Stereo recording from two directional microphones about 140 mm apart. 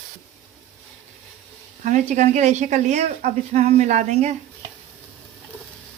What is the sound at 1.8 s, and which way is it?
A woman's voice, 60° right (ahead or behind).